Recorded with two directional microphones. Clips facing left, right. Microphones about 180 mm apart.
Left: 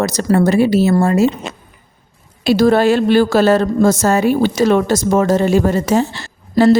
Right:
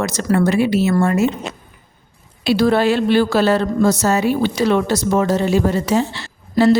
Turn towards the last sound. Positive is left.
turn(degrees=45)  # may be behind; listen again after turning